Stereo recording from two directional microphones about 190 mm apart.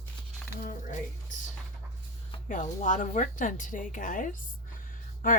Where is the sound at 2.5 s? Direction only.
40° left (ahead or behind).